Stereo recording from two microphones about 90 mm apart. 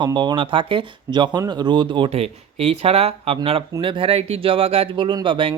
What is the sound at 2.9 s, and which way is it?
Speech, 90° right.